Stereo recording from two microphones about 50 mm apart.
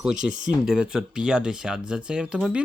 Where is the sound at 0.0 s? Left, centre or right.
Centre.